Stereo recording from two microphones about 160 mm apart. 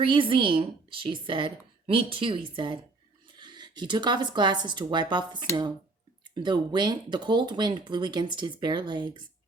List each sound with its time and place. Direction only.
0.0 s speech: 30° right (ahead or behind)